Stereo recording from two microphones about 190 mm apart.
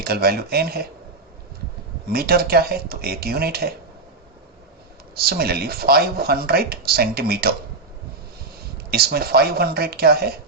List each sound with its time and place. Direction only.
0.0 s speech: 55° right (ahead or behind)
2.0 s speech: 55° right (ahead or behind)
5.1 s speech: 55° right (ahead or behind)
8.9 s speech: 55° right (ahead or behind)